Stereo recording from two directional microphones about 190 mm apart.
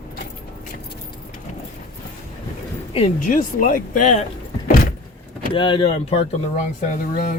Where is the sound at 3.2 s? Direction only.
45° left (ahead or behind).